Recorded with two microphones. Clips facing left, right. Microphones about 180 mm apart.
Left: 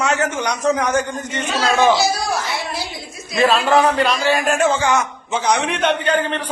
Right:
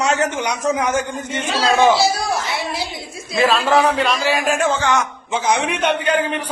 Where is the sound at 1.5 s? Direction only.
30° right (ahead or behind).